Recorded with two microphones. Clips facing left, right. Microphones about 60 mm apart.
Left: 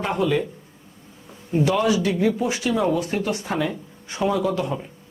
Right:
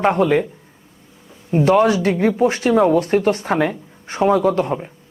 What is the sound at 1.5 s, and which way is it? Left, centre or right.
Speech, right.